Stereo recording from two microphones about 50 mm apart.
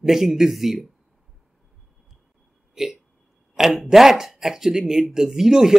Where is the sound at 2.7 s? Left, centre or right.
Centre.